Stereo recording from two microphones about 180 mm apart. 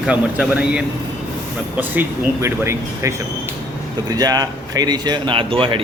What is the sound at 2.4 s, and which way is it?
Speech, 15° right (ahead or behind).